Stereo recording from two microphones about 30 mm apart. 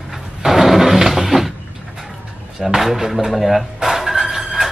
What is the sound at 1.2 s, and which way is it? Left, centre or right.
Cupboard open or close, centre.